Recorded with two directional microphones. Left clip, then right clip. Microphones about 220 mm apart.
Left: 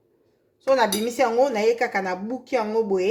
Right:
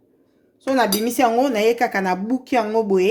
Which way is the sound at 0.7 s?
35° right (ahead or behind).